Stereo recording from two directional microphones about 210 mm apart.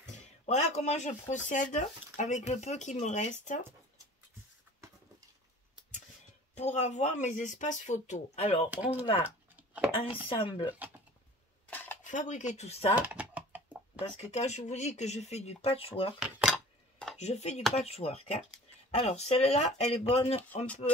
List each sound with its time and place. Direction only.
0.0 s a sound: 35° left (ahead or behind)
1.3 s speech: 35° left (ahead or behind)
6.5 s speech: 35° left (ahead or behind)
8.6 s speech: 10° right (ahead or behind)
10.2 s speech: 25° left (ahead or behind)
11.6 s dishes: 10° left (ahead or behind)
12.0 s speech: 35° left (ahead or behind)
13.0 s typing: 5° right (ahead or behind)
14.3 s speech: 30° left (ahead or behind)
16.2 s a sound: centre (ahead or behind)
17.2 s speech: 30° left (ahead or behind)
20.6 s speech: 5° left (ahead or behind)